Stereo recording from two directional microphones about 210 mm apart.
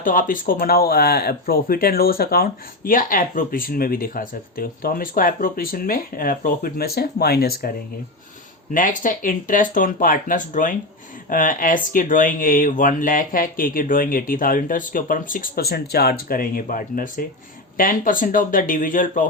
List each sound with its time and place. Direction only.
0.0 s speech: 40° left (ahead or behind)
8.7 s speech: 40° left (ahead or behind)